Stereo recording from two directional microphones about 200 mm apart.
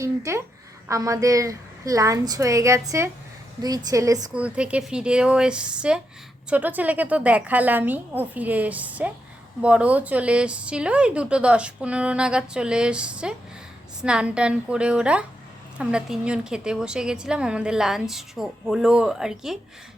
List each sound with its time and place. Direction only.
0.0 s a woman's voice: 15° right (ahead or behind)
4.4 s a woman's voice: 5° right (ahead or behind)